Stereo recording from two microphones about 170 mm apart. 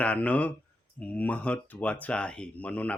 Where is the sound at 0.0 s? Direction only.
10° left (ahead or behind).